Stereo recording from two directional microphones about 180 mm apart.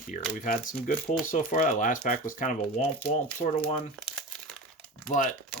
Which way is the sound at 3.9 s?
Centre (ahead or behind).